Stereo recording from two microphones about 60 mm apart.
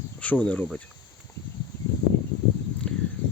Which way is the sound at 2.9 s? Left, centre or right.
Centre.